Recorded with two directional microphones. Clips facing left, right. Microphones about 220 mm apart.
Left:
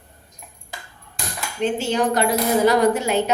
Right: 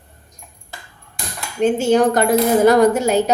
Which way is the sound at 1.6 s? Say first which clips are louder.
Right 7 dB; 50° right (ahead or behind).